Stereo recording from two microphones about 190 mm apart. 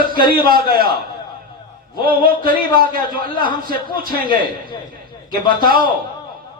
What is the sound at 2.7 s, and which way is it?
Speech, 50° right (ahead or behind).